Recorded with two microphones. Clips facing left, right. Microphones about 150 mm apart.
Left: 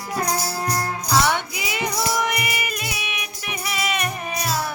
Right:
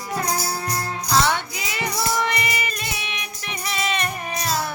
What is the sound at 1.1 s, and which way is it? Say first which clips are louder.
Music: even; 15° left (ahead or behind).